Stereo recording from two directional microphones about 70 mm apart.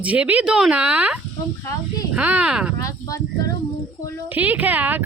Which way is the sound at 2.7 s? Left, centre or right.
Left.